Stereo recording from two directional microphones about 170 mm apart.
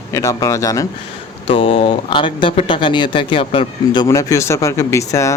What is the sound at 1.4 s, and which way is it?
Speech, 30° left (ahead or behind).